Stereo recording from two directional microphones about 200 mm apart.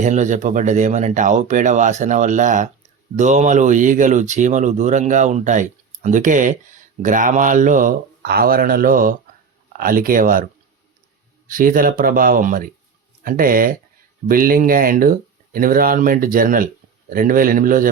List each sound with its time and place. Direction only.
0.0 s speech: 35° right (ahead or behind)